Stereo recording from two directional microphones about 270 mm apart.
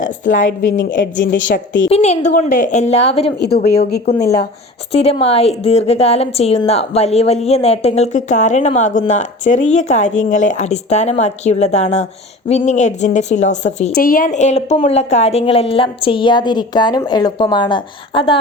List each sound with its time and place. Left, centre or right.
0.0 s a woman's voice: left
0.9 s a woman's voice: left
1.9 s a woman's voice: left